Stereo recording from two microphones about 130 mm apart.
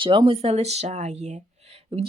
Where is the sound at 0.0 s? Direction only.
40° right (ahead or behind).